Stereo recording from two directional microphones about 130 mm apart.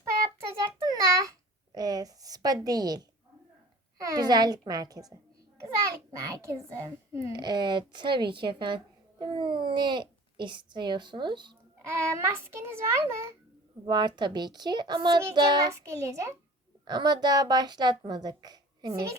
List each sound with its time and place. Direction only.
0.9 s babbling: 25° right (ahead or behind)
4.0 s a woman's voice: 30° right (ahead or behind)
11.9 s a child's voice: 20° right (ahead or behind)
13.8 s a woman's voice: 35° right (ahead or behind)
16.8 s a woman's voice: 35° right (ahead or behind)